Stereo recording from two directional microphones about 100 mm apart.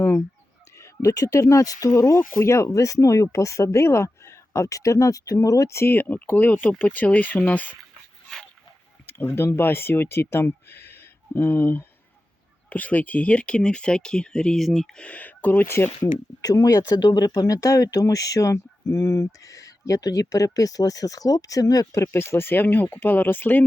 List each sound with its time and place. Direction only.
0.8 s speech: 35° left (ahead or behind); by 7.8 s 15° left (ahead or behind)
9.0 s speech: 20° left (ahead or behind); by 15.0 s centre (ahead or behind)
15.0 s speech: 15° left (ahead or behind)